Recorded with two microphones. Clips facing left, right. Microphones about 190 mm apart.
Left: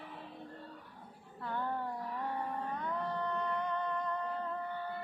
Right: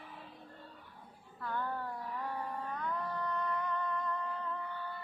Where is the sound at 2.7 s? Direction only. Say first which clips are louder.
Even; 25° left (ahead or behind).